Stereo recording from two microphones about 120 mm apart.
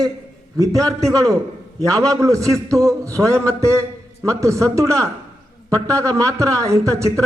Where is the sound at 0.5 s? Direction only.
30° right (ahead or behind).